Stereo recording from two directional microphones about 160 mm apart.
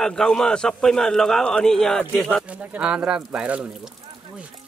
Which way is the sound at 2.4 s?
10° right (ahead or behind).